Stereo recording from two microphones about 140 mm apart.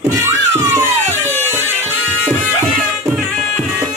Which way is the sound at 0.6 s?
20° right (ahead or behind).